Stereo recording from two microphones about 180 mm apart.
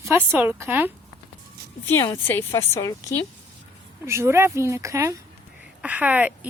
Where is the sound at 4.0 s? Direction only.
15° right (ahead or behind).